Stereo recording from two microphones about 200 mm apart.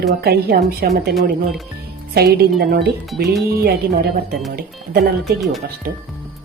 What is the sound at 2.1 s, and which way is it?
A woman's voice, 50° right (ahead or behind).